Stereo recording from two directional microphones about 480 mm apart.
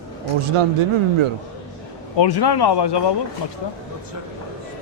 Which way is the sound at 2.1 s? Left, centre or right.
Left.